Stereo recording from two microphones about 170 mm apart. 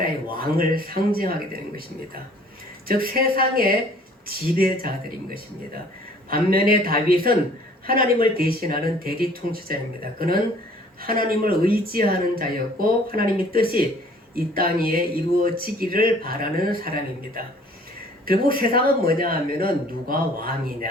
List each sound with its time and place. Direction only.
0.0 s a man's voice: 60° right (ahead or behind)
2.8 s speech: 60° right (ahead or behind)
6.5 s speech: 60° right (ahead or behind)